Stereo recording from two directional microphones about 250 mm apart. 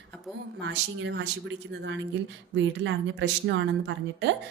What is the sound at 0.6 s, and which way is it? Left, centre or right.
Speech, right.